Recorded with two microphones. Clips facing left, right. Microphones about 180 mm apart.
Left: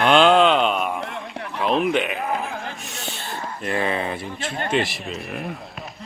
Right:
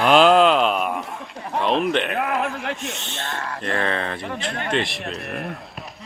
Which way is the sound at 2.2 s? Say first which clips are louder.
Right 3 dB; 75° right (ahead or behind).